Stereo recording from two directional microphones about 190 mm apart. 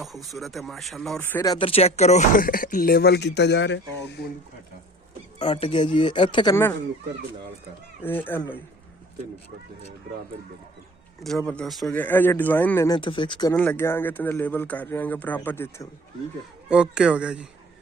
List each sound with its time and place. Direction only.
0.3 s speech: centre (ahead or behind)
1.4 s speech: 25° left (ahead or behind); by 3.8 s 70° left (ahead or behind)
5.4 s speech: 30° left (ahead or behind)
8.0 s speech: 10° left (ahead or behind)
11.2 s speech: centre (ahead or behind)
13.0 s speech: 25° left (ahead or behind)
13.6 s speech: 10° left (ahead or behind)
16.6 s speech: 5° right (ahead or behind)